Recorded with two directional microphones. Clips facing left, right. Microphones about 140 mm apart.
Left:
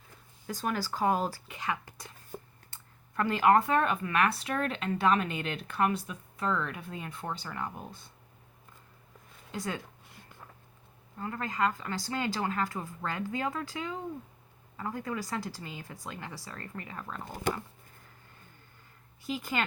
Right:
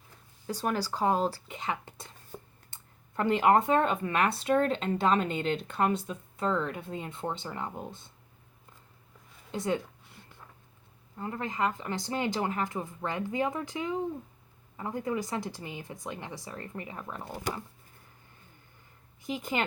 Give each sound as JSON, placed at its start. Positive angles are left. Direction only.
{"t": 0.6, "sound": "speech", "side_deg": -25}
{"t": 2.3, "sound": "a sound", "side_deg": 15}
{"t": 3.2, "sound": "speech", "side_deg": -25}
{"t": 9.5, "sound": "speech", "side_deg": -25}
{"t": 11.2, "sound": "speech", "side_deg": -25}
{"t": 19.2, "sound": "speech", "side_deg": -20}